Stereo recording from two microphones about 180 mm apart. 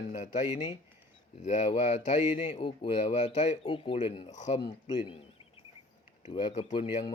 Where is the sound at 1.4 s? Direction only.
40° left (ahead or behind).